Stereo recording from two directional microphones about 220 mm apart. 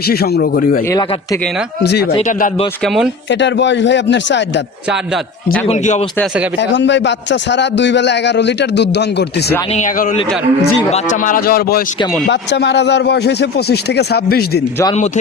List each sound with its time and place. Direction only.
0.1 s a man's voice: 45° left (ahead or behind)
0.9 s speech: 15° left (ahead or behind)
1.8 s a man's voice: 45° left (ahead or behind)
2.1 s speech: 30° left (ahead or behind)
2.8 s speech: centre (ahead or behind)
3.2 s a man's voice: 55° left (ahead or behind)
5.6 s speech: 30° left (ahead or behind)
6.6 s a man's voice: 55° left (ahead or behind)
9.7 s a man's voice: 35° left (ahead or behind)
14.9 s speech: 30° left (ahead or behind)